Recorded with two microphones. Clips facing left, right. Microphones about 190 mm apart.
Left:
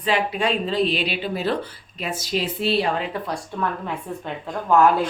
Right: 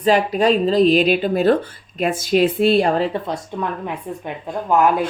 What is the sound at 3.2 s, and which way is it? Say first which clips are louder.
Speech: right 2 dB; 20° right (ahead or behind).